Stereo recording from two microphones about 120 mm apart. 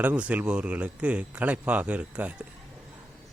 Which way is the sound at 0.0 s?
10° right (ahead or behind).